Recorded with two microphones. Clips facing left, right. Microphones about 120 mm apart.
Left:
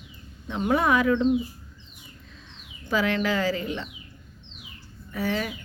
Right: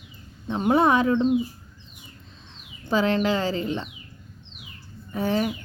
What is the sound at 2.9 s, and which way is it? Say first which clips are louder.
Speech: right 3 dB; 30° right (ahead or behind).